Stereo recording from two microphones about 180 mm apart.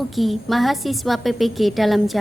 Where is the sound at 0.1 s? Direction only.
Centre (ahead or behind).